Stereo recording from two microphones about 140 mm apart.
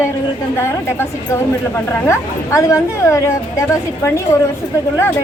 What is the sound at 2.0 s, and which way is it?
A woman's voice, 20° left (ahead or behind).